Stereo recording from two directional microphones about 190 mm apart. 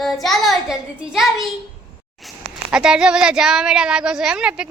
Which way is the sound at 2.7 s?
5° right (ahead or behind).